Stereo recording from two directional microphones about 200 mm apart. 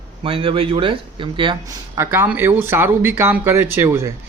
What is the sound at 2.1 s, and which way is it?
Speech, 10° right (ahead or behind).